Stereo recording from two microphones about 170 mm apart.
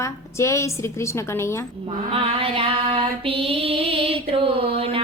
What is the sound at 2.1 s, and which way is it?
Female singing, 30° right (ahead or behind).